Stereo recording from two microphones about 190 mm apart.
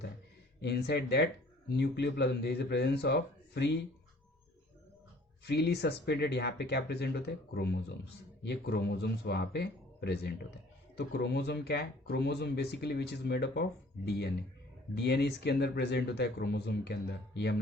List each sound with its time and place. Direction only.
0.6 s speech: 60° left (ahead or behind)
5.5 s speech: 60° left (ahead or behind)